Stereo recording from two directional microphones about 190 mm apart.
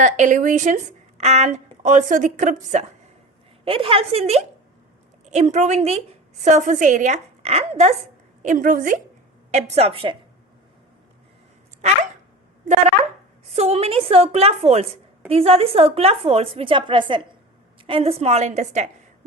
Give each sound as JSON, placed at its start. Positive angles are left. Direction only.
{"t": 0.0, "sound": "speech", "side_deg": -40}
{"t": 3.6, "sound": "a woman's voice", "side_deg": -30}
{"t": 13.6, "sound": "speech", "side_deg": -30}